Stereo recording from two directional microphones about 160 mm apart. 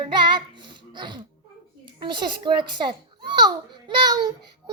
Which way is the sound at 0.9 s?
30° right (ahead or behind).